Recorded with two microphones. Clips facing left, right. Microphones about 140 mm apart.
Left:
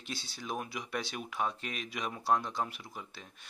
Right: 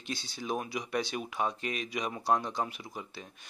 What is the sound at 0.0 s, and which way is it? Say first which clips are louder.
Speech: right 4 dB; 5° left (ahead or behind).